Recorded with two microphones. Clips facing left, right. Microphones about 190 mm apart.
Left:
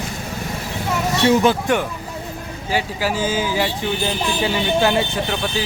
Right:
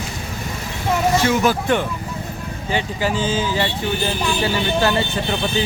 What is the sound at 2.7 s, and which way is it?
Speech, 5° left (ahead or behind).